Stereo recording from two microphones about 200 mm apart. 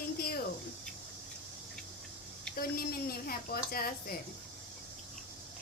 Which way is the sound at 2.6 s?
50° left (ahead or behind).